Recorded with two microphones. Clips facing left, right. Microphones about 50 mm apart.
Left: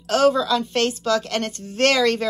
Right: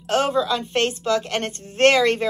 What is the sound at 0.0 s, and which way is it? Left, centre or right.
A woman's voice, right.